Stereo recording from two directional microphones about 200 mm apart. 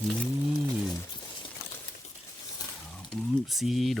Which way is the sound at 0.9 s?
20° left (ahead or behind).